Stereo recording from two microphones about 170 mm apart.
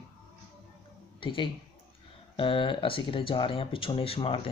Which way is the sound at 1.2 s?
30° left (ahead or behind).